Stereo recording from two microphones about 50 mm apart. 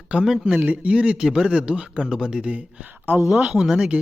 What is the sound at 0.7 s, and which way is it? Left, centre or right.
A man's voice, right.